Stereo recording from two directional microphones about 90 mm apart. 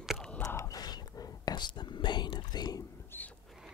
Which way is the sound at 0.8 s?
50° left (ahead or behind).